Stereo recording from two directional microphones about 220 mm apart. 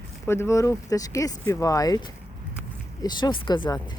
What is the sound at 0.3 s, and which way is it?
Speech, 10° left (ahead or behind).